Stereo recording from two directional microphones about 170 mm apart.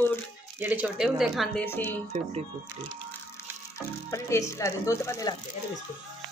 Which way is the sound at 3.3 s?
15° left (ahead or behind).